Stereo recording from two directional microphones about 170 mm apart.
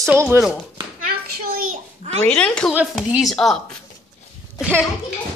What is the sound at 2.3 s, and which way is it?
A child's voice, 5° left (ahead or behind).